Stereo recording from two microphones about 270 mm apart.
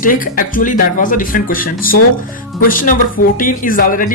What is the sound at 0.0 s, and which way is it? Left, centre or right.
Speech, left.